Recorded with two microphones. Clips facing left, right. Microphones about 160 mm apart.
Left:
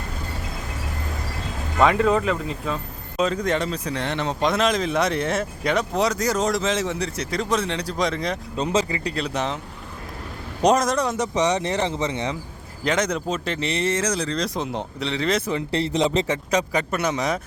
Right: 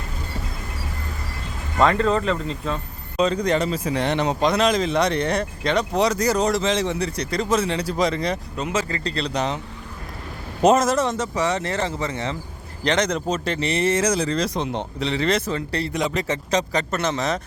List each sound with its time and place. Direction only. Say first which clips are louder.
1.8 s speech: even; 10° left (ahead or behind)
3.9 s speech: right 5 dB; 15° right (ahead or behind)
4.4 s speech: even; centre (ahead or behind)
8.5 s speech: left 7 dB; 30° left (ahead or behind)
8.8 s speech: even; 15° left (ahead or behind)
10.6 s speech: right 2 dB; 5° right (ahead or behind)
11.2 s speech: left 2 dB; 15° left (ahead or behind)
12.8 s speech: right 1 dB; 5° left (ahead or behind)
15.4 s speech: left 2 dB; 20° left (ahead or behind)
16.2 s speech: even; 10° left (ahead or behind)